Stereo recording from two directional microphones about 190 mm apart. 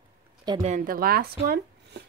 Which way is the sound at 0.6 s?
40° right (ahead or behind).